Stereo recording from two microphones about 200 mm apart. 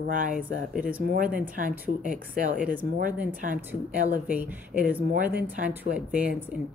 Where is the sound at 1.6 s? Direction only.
45° right (ahead or behind).